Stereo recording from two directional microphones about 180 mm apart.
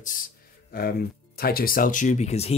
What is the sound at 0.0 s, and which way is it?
Speech, 50° left (ahead or behind).